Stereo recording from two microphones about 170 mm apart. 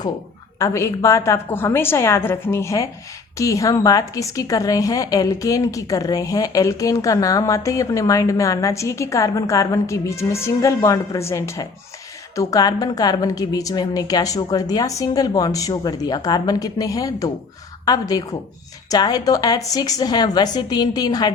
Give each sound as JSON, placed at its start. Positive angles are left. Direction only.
{"t": 0.6, "sound": "a woman's voice", "side_deg": 15}